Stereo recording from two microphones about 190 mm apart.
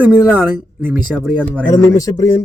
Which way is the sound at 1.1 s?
Centre (ahead or behind).